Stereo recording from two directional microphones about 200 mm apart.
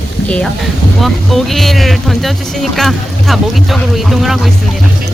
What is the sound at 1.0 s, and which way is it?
Speech, centre (ahead or behind).